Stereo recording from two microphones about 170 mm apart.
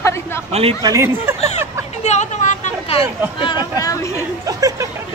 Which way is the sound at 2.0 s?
40° left (ahead or behind).